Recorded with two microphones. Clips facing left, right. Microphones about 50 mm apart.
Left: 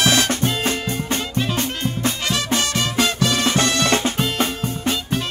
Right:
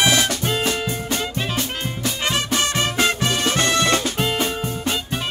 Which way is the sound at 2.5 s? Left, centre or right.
Right.